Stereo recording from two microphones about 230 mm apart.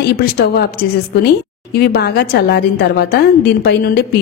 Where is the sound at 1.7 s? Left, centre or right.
Left.